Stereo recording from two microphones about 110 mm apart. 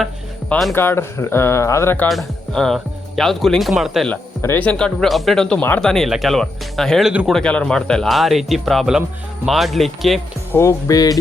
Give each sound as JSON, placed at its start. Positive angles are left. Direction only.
{"t": 0.7, "sound": "speech", "side_deg": 20}
{"t": 2.0, "sound": "speech", "side_deg": 0}
{"t": 4.1, "sound": "speech", "side_deg": 15}
{"t": 10.5, "sound": "speech", "side_deg": 30}